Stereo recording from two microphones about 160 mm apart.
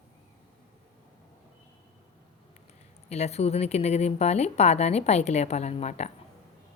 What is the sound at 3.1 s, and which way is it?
Speech, 40° left (ahead or behind).